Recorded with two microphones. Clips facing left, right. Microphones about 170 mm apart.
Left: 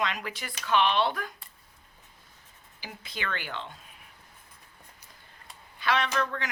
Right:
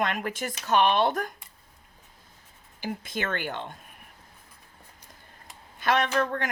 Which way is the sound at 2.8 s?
50° right (ahead or behind).